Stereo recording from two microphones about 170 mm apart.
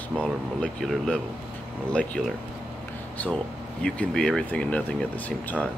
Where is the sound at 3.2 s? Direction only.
10° left (ahead or behind).